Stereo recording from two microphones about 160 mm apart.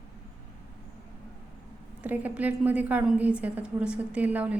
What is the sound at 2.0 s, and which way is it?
A woman's voice, 10° right (ahead or behind).